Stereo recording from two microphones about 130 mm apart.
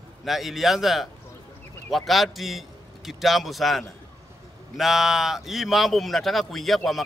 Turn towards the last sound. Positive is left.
turn(degrees=0)  # may be behind; listen again after turning